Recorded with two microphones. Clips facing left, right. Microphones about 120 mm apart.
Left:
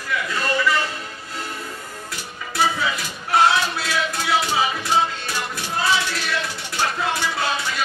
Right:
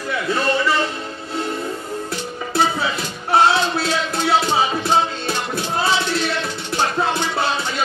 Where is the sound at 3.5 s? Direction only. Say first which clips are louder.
Right 3 dB; 25° right (ahead or behind).